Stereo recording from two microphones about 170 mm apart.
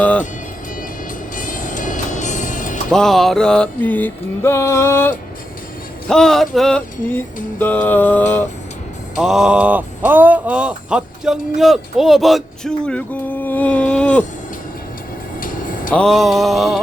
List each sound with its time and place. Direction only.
1.4 s music: 50° left (ahead or behind)
2.9 s music: centre (ahead or behind)
6.1 s speech: 5° left (ahead or behind)
7.6 s music: 10° left (ahead or behind)
9.1 s speech: 5° right (ahead or behind)
15.4 s music: 50° left (ahead or behind)
15.9 s speech: 5° left (ahead or behind)